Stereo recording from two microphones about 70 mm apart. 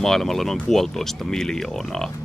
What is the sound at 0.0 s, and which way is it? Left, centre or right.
Speech, centre.